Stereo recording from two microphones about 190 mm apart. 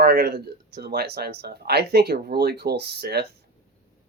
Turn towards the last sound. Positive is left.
turn(degrees=-60)  # may be behind; listen again after turning